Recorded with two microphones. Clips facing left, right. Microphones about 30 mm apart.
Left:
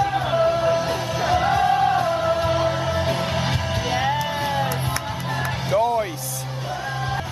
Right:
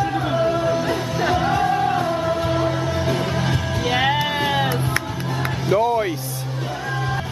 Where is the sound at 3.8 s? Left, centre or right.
Right.